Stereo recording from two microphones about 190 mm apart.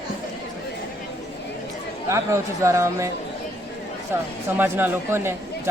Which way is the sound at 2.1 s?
15° right (ahead or behind).